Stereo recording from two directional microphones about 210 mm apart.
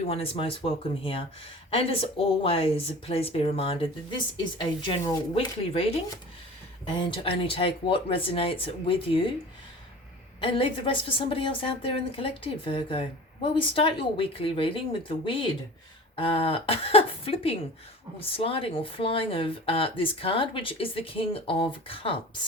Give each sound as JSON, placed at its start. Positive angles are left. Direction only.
{"t": 0.1, "sound": "a woman's voice", "side_deg": 25}
{"t": 10.4, "sound": "a woman's voice", "side_deg": 25}